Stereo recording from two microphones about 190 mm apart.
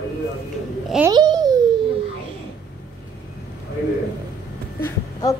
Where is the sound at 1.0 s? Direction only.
20° right (ahead or behind).